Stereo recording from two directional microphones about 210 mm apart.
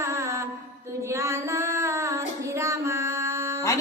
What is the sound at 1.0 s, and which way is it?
Female singing, 15° right (ahead or behind).